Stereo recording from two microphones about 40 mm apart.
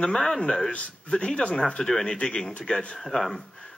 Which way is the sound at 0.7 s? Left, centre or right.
Left.